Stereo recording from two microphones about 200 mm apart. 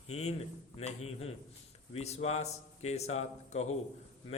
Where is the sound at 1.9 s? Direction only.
30° left (ahead or behind).